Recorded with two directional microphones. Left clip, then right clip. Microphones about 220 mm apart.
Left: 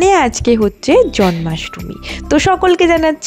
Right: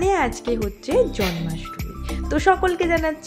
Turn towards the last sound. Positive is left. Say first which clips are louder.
# left 10 dB
turn(degrees=40)  # may be behind; listen again after turning